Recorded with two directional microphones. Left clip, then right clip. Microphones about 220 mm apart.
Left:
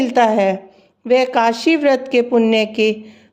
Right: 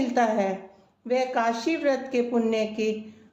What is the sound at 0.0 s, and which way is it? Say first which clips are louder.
Speech: left 10 dB; 45° left (ahead or behind).